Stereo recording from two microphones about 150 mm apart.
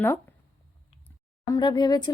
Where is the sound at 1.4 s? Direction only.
25° left (ahead or behind).